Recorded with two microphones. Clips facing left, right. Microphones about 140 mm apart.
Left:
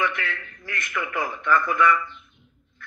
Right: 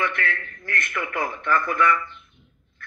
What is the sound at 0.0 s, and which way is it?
A man's voice, 55° right (ahead or behind).